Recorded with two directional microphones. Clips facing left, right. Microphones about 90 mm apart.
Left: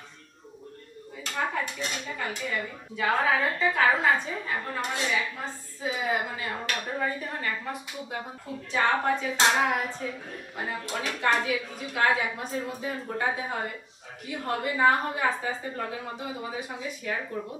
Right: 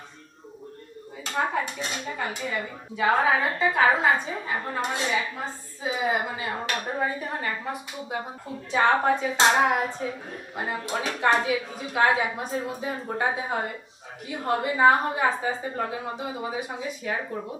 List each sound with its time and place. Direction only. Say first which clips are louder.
1.2 s a woman's voice: right 3 dB; 20° right (ahead or behind)